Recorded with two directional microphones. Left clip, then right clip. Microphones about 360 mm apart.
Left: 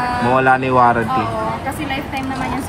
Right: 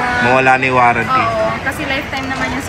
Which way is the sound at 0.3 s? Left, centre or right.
Centre.